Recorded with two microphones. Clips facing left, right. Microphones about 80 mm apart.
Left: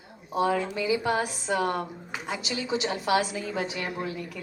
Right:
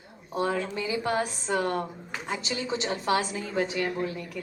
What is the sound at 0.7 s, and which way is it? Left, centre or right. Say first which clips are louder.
A woman's voice: left 2 dB; right.